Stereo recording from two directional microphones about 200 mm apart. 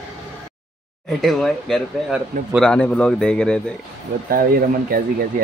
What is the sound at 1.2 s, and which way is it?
A man's voice, centre (ahead or behind).